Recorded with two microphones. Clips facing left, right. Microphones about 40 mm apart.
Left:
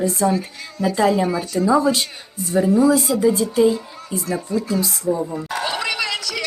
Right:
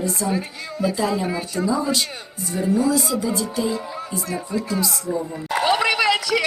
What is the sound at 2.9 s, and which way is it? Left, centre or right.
Speech, left.